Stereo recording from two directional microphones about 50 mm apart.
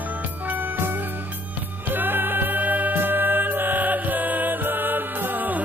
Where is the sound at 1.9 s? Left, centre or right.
Right.